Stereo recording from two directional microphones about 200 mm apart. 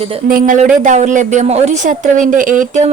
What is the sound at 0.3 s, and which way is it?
Speech, 45° right (ahead or behind).